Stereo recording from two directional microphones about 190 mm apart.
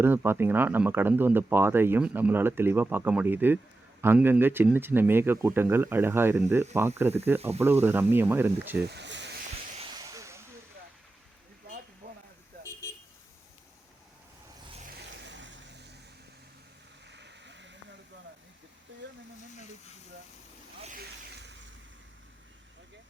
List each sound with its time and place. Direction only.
0.0 s speech: 10° right (ahead or behind)
8.9 s snake: 65° right (ahead or behind)
9.9 s a sound: 20° right (ahead or behind)
12.0 s vehicle: 45° right (ahead or behind)
15.1 s vehicle: 70° right (ahead or behind)
17.1 s sheep: 65° right (ahead or behind)
20.9 s a sound: 60° right (ahead or behind)